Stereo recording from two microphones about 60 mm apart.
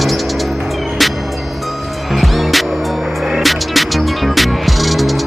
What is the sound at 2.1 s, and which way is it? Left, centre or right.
Music, centre.